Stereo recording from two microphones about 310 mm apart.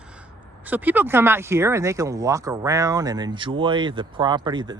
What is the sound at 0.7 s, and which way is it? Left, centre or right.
Speech, centre.